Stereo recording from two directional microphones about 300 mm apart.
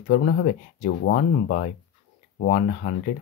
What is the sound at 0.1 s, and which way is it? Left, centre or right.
Speech, left.